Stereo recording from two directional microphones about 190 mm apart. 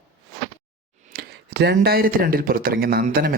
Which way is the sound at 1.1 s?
55° right (ahead or behind).